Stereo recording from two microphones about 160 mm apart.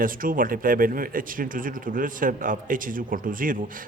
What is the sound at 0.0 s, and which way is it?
Speech, 60° right (ahead or behind).